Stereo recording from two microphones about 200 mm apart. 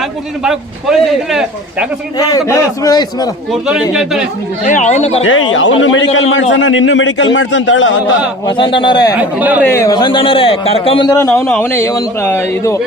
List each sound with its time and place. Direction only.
0.4 s speech: centre (ahead or behind)
2.1 s a man's voice: 20° left (ahead or behind)
3.5 s speech: centre (ahead or behind)
4.6 s speech: 35° left (ahead or behind)
5.2 s a man's voice: 75° left (ahead or behind)
8.4 s a man's voice: 25° left (ahead or behind)
9.4 s speech: 10° right (ahead or behind)
9.6 s a man's voice: 15° left (ahead or behind)